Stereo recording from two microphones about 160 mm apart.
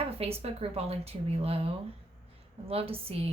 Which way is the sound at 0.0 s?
40° right (ahead or behind).